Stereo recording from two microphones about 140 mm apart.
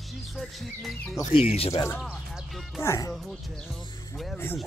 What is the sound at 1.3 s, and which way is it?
Speech, 45° left (ahead or behind).